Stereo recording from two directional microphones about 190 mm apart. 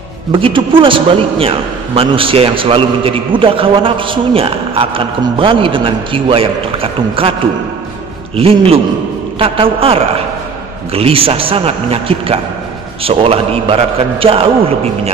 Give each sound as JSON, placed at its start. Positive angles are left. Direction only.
{"t": 0.3, "sound": "a man's voice", "side_deg": -25}
{"t": 8.4, "sound": "a man's voice", "side_deg": -30}